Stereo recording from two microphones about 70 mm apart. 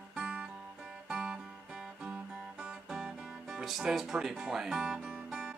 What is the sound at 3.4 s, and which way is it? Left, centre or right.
Speech, centre.